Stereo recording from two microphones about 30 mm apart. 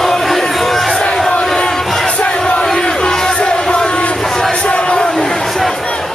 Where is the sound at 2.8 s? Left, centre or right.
Left.